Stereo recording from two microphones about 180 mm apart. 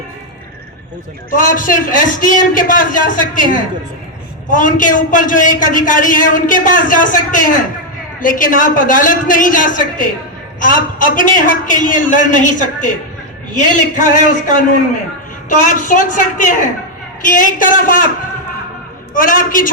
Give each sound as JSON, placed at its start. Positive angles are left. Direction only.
{"t": 1.3, "sound": "a man's voice", "side_deg": 50}
{"t": 19.1, "sound": "a man's voice", "side_deg": 50}